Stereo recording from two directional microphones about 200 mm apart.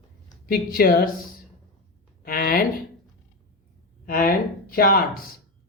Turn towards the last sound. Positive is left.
turn(degrees=45)  # may be behind; listen again after turning